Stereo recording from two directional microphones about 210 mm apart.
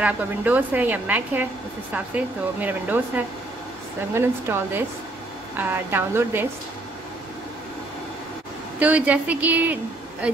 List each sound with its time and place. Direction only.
0.0 s a woman's voice: 10° right (ahead or behind)
8.7 s a woman's voice: 5° right (ahead or behind)